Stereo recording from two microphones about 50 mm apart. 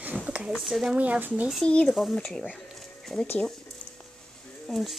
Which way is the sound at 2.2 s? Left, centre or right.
Centre.